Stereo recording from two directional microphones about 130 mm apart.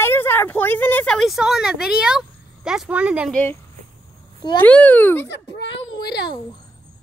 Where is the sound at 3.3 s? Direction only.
15° left (ahead or behind).